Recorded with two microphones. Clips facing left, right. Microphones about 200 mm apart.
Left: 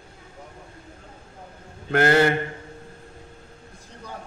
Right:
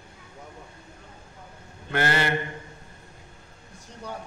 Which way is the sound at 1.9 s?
55° left (ahead or behind).